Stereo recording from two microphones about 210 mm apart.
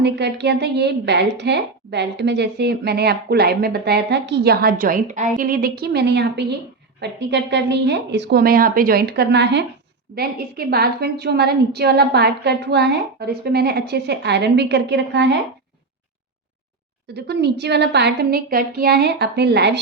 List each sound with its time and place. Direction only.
0.0 s a woman's voice: 55° right (ahead or behind)
17.2 s a woman's voice: 55° right (ahead or behind)